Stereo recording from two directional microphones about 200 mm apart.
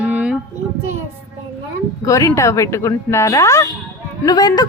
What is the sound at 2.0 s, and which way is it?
A woman's voice, 15° left (ahead or behind).